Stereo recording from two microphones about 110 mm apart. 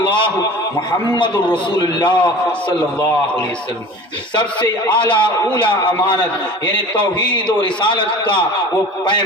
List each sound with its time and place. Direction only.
0.0 s a sound: 50° left (ahead or behind)
1.1 s a man's voice: 45° left (ahead or behind)
4.9 s a man's voice: 50° left (ahead or behind)
7.6 s a man's voice: 45° left (ahead or behind)